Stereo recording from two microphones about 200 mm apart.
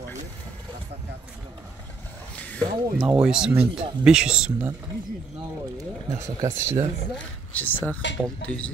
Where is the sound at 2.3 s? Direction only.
5° left (ahead or behind).